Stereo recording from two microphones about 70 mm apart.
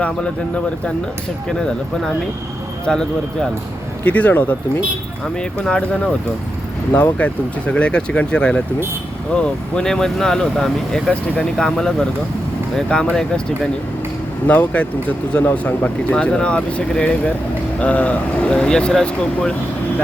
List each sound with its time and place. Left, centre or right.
0.0 s speech: centre
4.0 s speech: left
5.4 s speech: centre
6.9 s speech: left
14.4 s speech: left